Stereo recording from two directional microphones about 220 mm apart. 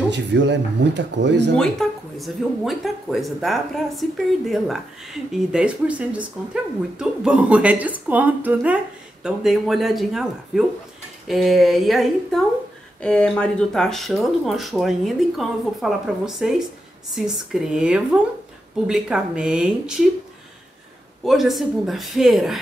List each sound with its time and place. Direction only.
0.1 s speech: 50° right (ahead or behind)
1.6 s speech: centre (ahead or behind)
21.2 s speech: centre (ahead or behind)